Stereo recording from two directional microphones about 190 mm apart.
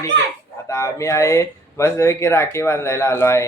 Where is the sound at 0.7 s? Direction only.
15° left (ahead or behind).